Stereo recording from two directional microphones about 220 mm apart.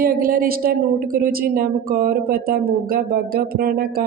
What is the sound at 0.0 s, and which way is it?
A woman's voice, 40° right (ahead or behind).